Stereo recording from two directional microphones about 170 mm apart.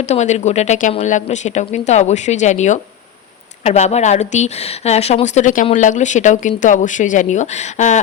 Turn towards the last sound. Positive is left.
turn(degrees=45)  # may be behind; listen again after turning